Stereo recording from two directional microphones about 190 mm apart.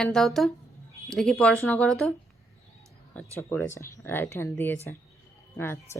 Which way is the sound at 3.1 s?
5° left (ahead or behind).